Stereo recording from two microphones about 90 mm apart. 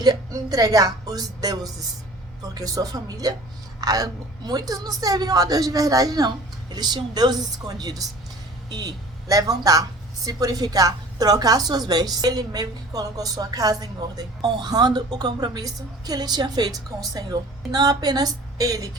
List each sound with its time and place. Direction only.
0.0 s a woman's voice: 45° right (ahead or behind)